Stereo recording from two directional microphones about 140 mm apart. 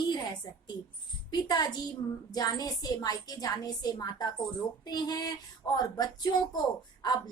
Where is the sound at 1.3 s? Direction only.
30° left (ahead or behind).